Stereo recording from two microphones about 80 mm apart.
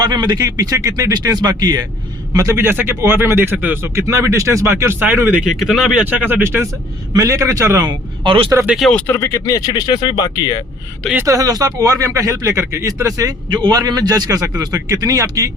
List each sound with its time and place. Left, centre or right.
0.0 s speech: right
2.3 s speech: right
2.6 s speech: right
4.0 s speech: right
5.5 s speech: centre
6.0 s speech: centre
7.1 s speech: right
7.9 s speech: right
8.8 s speech: centre
9.1 s speech: left
11.3 s speech: right
13.5 s speech: right